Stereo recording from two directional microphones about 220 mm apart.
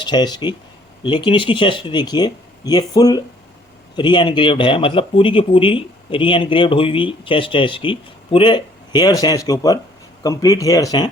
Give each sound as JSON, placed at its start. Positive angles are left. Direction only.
{"t": 0.0, "sound": "speech", "side_deg": 20}